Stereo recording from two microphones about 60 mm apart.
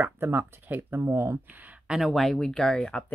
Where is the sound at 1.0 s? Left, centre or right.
Right.